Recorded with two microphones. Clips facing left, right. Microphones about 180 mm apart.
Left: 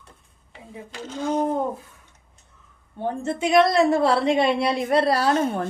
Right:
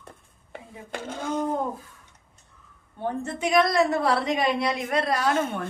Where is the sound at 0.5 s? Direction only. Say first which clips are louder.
Right 1 dB; 55° right (ahead or behind).